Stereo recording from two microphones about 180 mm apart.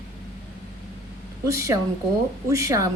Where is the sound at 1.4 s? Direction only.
15° right (ahead or behind).